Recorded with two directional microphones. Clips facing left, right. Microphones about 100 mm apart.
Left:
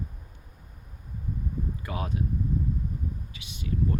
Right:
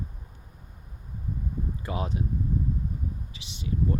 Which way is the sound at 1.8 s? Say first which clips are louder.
Right 4 dB; 25° right (ahead or behind).